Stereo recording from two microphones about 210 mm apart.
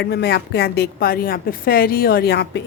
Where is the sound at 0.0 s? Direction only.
50° left (ahead or behind).